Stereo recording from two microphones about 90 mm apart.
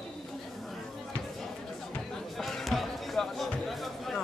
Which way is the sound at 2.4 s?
Centre (ahead or behind).